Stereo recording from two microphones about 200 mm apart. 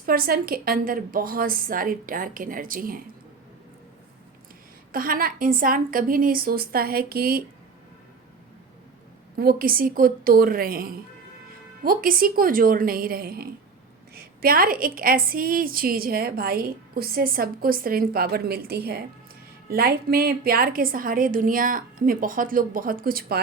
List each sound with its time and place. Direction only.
0.0 s a woman's voice: 45° right (ahead or behind)
4.9 s a woman's voice: 45° right (ahead or behind)
9.3 s a woman's voice: 50° right (ahead or behind)